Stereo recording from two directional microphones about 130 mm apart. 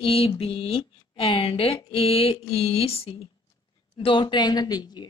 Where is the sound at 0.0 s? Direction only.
45° left (ahead or behind).